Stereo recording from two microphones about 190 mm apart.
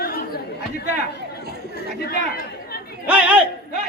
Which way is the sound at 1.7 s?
55° left (ahead or behind).